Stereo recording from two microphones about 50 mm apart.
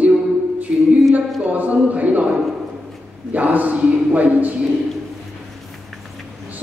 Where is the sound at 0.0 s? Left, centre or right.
Right.